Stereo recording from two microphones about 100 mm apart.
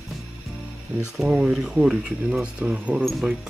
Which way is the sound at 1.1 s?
5° right (ahead or behind).